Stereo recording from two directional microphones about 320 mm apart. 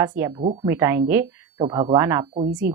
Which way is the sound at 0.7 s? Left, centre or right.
Centre.